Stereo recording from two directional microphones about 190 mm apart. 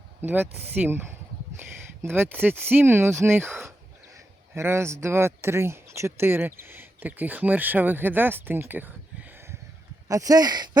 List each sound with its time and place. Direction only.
0.2 s speech: 10° right (ahead or behind)